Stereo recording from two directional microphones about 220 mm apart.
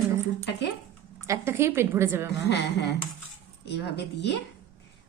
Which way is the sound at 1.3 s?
10° right (ahead or behind).